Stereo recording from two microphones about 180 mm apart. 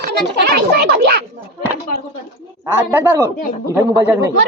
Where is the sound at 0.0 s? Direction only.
60° right (ahead or behind).